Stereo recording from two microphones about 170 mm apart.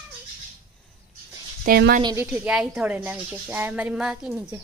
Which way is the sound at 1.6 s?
60° right (ahead or behind).